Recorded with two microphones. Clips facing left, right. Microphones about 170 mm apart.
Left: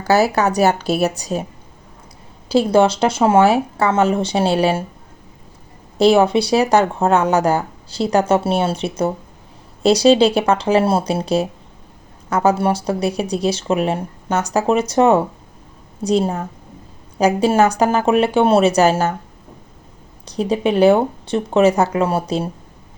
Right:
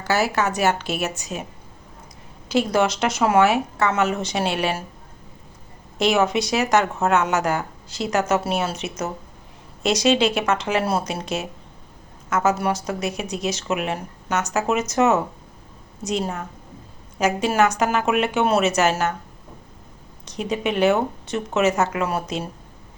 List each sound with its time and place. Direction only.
0.0 s speech: 35° left (ahead or behind)
2.5 s speech: 30° left (ahead or behind)
6.0 s speech: 30° left (ahead or behind)
20.2 s speech: 35° left (ahead or behind)